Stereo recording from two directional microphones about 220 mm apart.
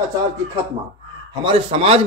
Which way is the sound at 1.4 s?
25° right (ahead or behind).